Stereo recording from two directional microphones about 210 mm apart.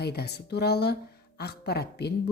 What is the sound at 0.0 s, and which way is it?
A woman's voice, 50° left (ahead or behind).